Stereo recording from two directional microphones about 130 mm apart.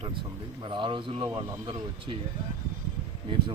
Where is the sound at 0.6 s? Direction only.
40° right (ahead or behind).